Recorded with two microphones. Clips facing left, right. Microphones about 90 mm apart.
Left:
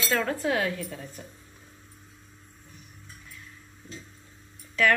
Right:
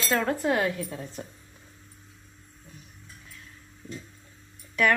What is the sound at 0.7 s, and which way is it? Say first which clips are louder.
Speech: right 2 dB; 25° right (ahead or behind).